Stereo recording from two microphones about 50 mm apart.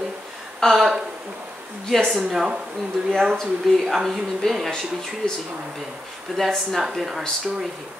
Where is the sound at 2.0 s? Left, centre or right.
Centre.